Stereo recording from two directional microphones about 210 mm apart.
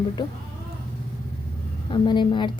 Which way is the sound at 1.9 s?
20° left (ahead or behind).